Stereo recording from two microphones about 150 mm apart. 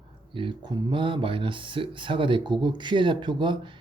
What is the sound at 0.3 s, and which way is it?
Speech, 35° right (ahead or behind).